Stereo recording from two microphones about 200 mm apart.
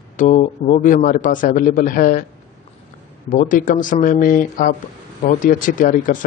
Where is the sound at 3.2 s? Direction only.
40° left (ahead or behind).